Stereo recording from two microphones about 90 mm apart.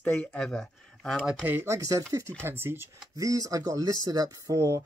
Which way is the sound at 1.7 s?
35° right (ahead or behind).